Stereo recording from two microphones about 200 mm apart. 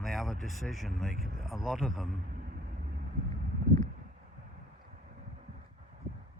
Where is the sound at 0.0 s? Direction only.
Centre (ahead or behind).